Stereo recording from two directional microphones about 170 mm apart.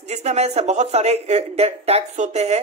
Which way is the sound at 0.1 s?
40° right (ahead or behind).